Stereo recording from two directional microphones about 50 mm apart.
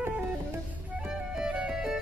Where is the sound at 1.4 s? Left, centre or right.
Centre.